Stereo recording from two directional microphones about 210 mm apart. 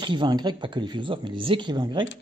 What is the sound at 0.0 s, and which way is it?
Speech, 20° right (ahead or behind).